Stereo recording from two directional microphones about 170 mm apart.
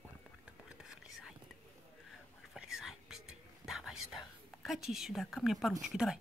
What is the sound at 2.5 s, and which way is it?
Whispering, 5° right (ahead or behind).